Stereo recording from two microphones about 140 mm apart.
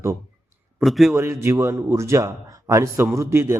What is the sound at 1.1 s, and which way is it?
A man's voice, 20° right (ahead or behind).